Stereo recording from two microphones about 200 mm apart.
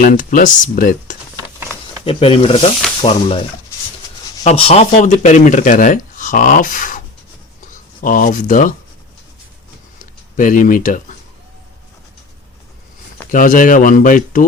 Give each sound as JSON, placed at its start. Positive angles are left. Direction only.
{"t": 0.0, "sound": "speech", "side_deg": 40}
{"t": 2.0, "sound": "speech", "side_deg": 25}
{"t": 4.4, "sound": "speech", "side_deg": 30}
{"t": 10.0, "sound": "speech", "side_deg": 40}
{"t": 13.3, "sound": "speech", "side_deg": 40}